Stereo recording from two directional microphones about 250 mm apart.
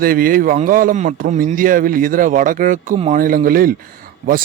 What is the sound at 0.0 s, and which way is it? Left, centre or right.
A man's voice, right.